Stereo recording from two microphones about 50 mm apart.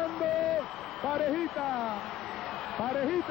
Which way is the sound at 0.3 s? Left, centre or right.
Centre.